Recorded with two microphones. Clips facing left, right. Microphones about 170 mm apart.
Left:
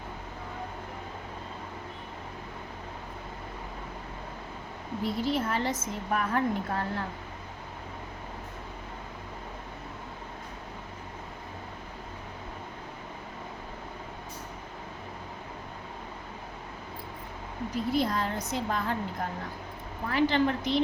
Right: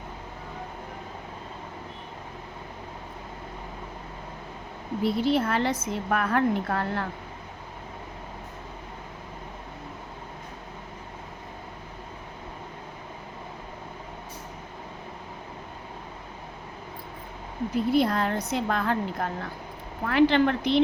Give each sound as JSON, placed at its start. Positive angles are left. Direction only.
{"t": 5.0, "sound": "a woman's voice", "side_deg": -70}
{"t": 17.9, "sound": "a woman's voice", "side_deg": -65}